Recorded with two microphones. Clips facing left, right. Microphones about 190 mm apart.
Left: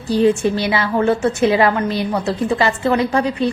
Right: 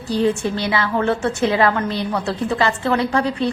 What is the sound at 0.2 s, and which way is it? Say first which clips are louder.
A woman's voice: left 4 dB; 15° left (ahead or behind).